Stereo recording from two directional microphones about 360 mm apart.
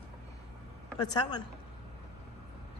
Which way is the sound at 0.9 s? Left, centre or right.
Centre.